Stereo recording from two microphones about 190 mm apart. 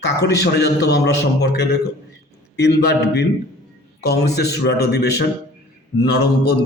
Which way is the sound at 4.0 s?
60° left (ahead or behind).